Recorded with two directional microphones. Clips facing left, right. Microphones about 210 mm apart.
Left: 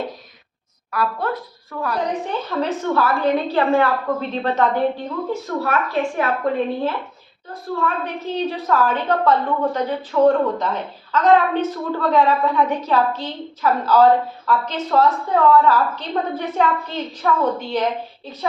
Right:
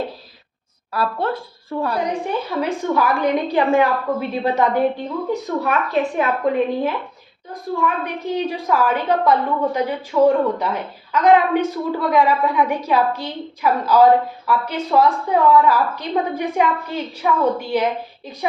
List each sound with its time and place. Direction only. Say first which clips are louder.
0.9 s a woman's voice: right 1 dB; 30° right (ahead or behind)
2.0 s a woman's voice: right 1 dB; 10° right (ahead or behind)